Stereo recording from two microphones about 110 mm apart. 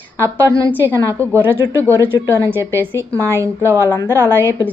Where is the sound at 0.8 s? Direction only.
20° left (ahead or behind).